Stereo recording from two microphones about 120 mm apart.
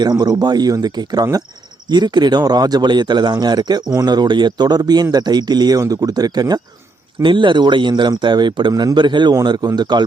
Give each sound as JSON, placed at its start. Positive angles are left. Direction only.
{"t": 0.0, "sound": "speech", "side_deg": -35}